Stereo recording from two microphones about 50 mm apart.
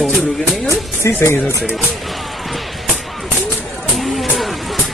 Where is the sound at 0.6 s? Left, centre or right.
Left.